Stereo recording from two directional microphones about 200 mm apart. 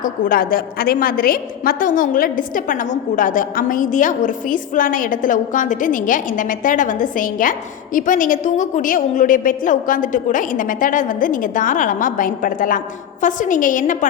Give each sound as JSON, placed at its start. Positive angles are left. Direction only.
{"t": 0.0, "sound": "a woman's voice", "side_deg": 45}